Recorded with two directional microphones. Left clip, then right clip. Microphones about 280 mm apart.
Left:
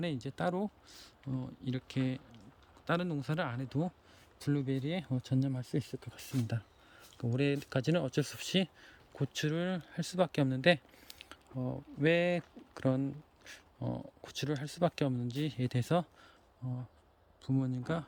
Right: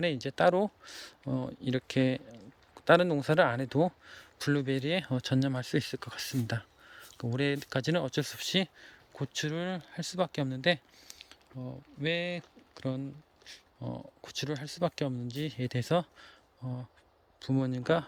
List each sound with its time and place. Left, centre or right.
0.0 s speech: centre